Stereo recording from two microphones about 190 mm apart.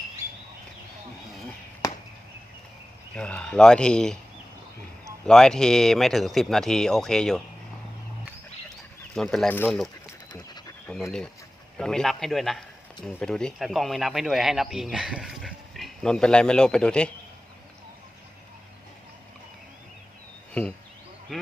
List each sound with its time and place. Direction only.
1.8 s chop: 15° left (ahead or behind)
3.2 s a man's voice: 5° left (ahead or behind)
5.2 s a man's voice: 5° left (ahead or behind)
9.1 s a man's voice: centre (ahead or behind)
10.3 s dog: 20° left (ahead or behind)
10.8 s a man's voice: 5° left (ahead or behind)
20.5 s speech: 5° left (ahead or behind)